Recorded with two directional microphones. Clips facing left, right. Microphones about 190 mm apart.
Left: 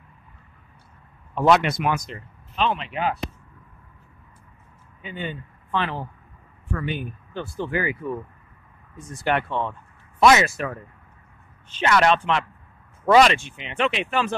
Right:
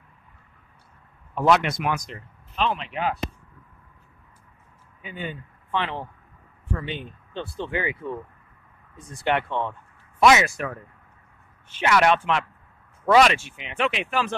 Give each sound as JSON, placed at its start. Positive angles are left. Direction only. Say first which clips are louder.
{"t": 1.3, "sound": "speech", "louder": "left 2 dB", "side_deg": 0}
{"t": 5.0, "sound": "a man's voice", "louder": "left 2 dB", "side_deg": -5}
{"t": 5.7, "sound": "speech", "louder": "left 1 dB", "side_deg": -20}
{"t": 10.2, "sound": "speech", "louder": "left 1 dB", "side_deg": -5}
{"t": 11.8, "sound": "a man's voice", "louder": "left 1 dB", "side_deg": -10}